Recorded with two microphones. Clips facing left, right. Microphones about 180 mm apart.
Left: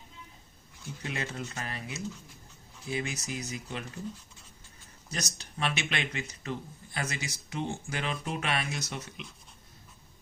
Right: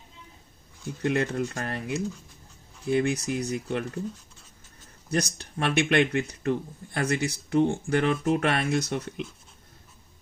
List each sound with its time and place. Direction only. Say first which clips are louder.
1.0 s speech: right 11 dB; 60° right (ahead or behind)
5.1 s speech: right 10 dB; 60° right (ahead or behind)